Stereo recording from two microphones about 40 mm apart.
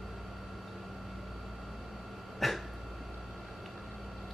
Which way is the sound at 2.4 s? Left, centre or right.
Centre.